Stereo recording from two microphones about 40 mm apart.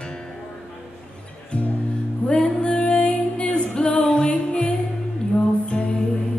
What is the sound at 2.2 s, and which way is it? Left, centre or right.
Music, left.